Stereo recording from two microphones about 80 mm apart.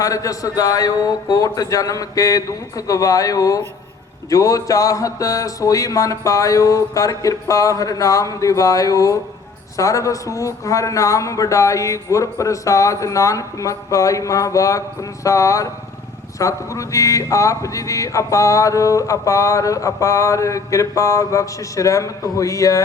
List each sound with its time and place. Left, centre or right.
0.0 s speech: left